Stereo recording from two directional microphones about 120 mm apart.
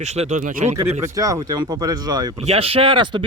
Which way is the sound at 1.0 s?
30° right (ahead or behind).